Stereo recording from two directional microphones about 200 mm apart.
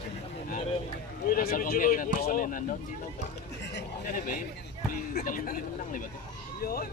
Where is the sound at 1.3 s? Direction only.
45° left (ahead or behind).